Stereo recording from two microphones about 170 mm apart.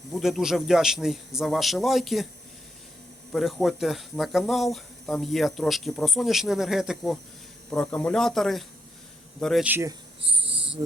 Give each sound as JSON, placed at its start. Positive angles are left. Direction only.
{"t": 0.1, "sound": "speech", "side_deg": 0}
{"t": 3.3, "sound": "speech", "side_deg": 0}
{"t": 9.6, "sound": "speech", "side_deg": -10}
{"t": 10.2, "sound": "cricket", "side_deg": -35}